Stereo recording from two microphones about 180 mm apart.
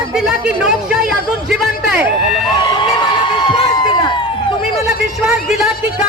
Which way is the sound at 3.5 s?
30° left (ahead or behind).